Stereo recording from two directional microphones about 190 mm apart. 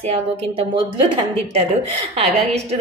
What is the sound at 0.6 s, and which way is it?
A woman's voice, 30° right (ahead or behind).